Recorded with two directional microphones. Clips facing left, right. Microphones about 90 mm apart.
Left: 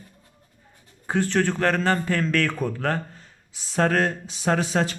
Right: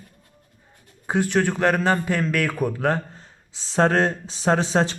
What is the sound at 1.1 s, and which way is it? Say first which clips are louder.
Speech: right 1 dB; 15° right (ahead or behind).